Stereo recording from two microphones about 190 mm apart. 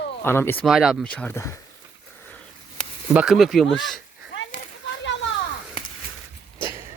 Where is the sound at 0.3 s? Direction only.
10° left (ahead or behind).